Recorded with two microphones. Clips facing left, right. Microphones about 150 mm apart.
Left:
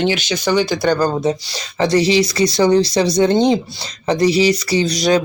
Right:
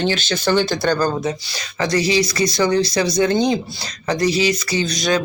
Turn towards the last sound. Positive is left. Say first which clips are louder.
# left 4 dB
turn(degrees=35)  # may be behind; listen again after turning